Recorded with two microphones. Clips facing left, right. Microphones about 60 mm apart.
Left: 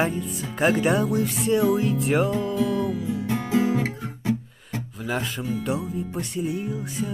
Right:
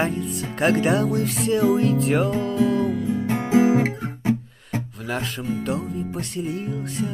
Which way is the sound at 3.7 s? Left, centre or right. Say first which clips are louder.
Right 5 dB; right.